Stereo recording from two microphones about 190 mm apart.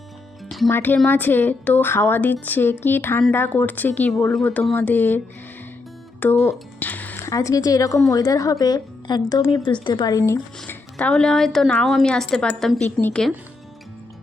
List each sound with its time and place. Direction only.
0.4 s a woman's voice: centre (ahead or behind); by 10.8 s 15° left (ahead or behind)
10.9 s a woman's voice: 5° left (ahead or behind)